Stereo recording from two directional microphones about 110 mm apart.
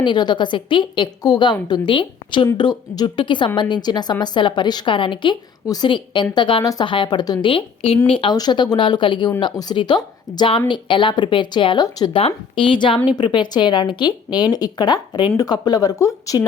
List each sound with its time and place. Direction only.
0.0 s a woman's voice: 40° left (ahead or behind)
5.6 s a woman's voice: 40° left (ahead or behind)
7.4 s a woman's voice: 55° left (ahead or behind)
8.4 s a woman's voice: 40° left (ahead or behind)
12.1 s a woman's voice: 55° left (ahead or behind); by 16.4 s 30° left (ahead or behind)